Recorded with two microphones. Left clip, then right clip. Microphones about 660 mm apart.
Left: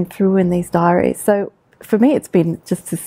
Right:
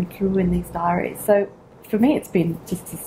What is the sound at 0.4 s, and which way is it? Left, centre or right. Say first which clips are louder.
Speech: left 7 dB; left.